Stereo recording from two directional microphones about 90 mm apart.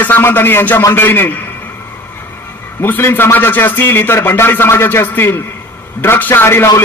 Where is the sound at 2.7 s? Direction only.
25° left (ahead or behind).